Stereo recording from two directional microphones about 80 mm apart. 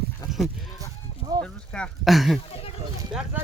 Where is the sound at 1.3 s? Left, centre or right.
Right.